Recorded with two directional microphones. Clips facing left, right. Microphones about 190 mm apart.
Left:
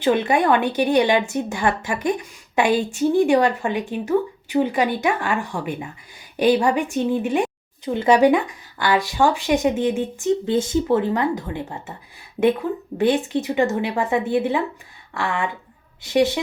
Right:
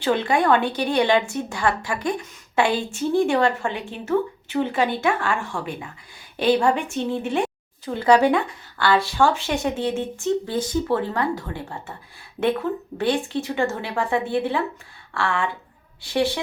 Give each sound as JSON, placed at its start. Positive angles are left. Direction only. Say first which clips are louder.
{"t": 0.0, "sound": "a woman's voice", "louder": "left 2 dB", "side_deg": 20}